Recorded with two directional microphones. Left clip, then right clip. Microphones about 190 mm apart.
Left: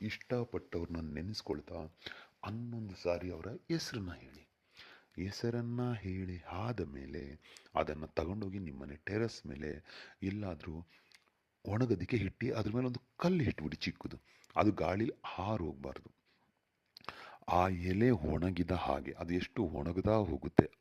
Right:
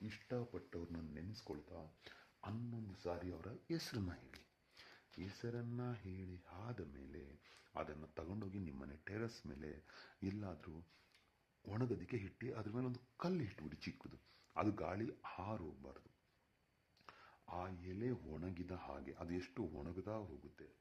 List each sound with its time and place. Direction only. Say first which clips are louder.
0.0 s speech: left 9 dB; 35° left (ahead or behind)
3.0 s speech: left 10 dB; 25° left (ahead or behind)
4.8 s a sound: left 6 dB; 20° left (ahead or behind)
5.2 s speech: left 10 dB; 45° left (ahead or behind)
8.4 s speech: left 7 dB; 30° left (ahead or behind); by 16.0 s 50° left (ahead or behind)
17.1 s speech: left 18 dB; 55° left (ahead or behind)
19.1 s speech: left 10 dB; 30° left (ahead or behind); by 20.7 s 50° left (ahead or behind)